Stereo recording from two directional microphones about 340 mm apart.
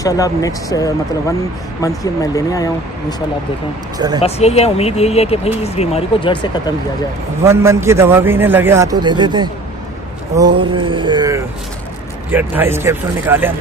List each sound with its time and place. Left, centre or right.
0.0 s speech: centre
3.9 s speech: centre
4.2 s speech: centre
7.4 s a man's voice: centre
10.3 s a sound: centre
12.3 s a man's voice: centre